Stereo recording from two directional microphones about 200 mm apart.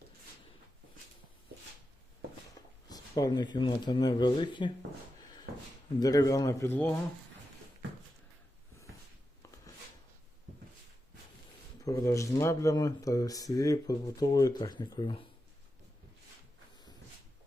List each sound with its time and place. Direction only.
2.6 s a sound: 20° left (ahead or behind)
2.9 s speech: 20° left (ahead or behind)
6.0 s speech: 20° left (ahead or behind)
11.8 s speech: 15° left (ahead or behind)